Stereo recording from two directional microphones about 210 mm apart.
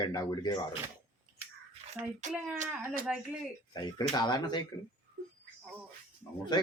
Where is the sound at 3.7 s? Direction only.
20° left (ahead or behind).